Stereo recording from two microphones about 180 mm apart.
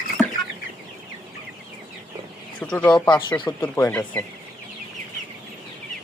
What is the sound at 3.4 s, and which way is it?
Speech, 20° left (ahead or behind).